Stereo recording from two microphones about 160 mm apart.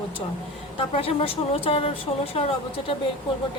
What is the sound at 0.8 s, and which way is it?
A woman's voice, 35° left (ahead or behind).